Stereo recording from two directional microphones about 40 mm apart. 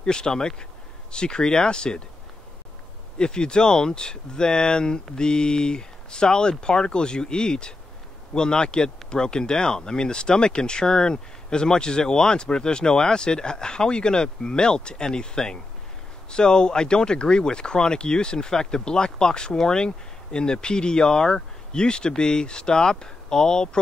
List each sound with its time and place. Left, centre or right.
0.0 s speech: centre
3.2 s speech: left